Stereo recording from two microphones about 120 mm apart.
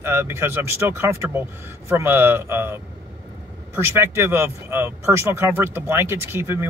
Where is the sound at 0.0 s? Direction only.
20° right (ahead or behind).